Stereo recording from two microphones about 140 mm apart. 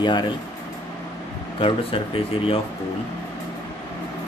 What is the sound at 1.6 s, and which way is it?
Speech, 40° left (ahead or behind).